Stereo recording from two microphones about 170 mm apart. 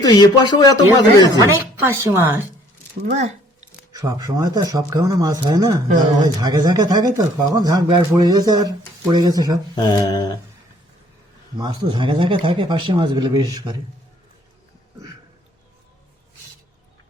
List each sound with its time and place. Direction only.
0.0 s speech: 25° left (ahead or behind)
1.4 s a woman's voice: 15° right (ahead or behind)
3.9 s speech: 20° right (ahead or behind)
9.7 s speech: 25° left (ahead or behind)
11.5 s speech: 25° right (ahead or behind)